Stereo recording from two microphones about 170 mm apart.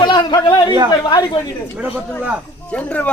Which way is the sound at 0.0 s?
25° left (ahead or behind).